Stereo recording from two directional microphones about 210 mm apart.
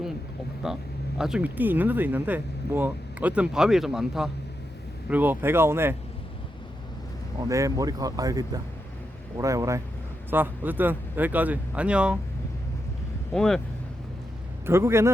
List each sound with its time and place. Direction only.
0.6 s speech: centre (ahead or behind)
7.4 s speech: 15° right (ahead or behind)
13.3 s speech: centre (ahead or behind)
14.7 s speech: 10° right (ahead or behind)